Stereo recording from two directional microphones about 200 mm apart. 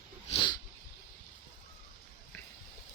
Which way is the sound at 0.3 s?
25° left (ahead or behind).